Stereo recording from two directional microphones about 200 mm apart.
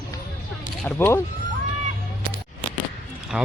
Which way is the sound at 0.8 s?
10° left (ahead or behind).